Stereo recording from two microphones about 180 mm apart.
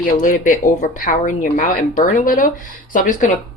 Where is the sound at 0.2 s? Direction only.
45° left (ahead or behind).